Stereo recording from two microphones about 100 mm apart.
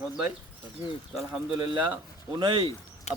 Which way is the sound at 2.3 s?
55° right (ahead or behind).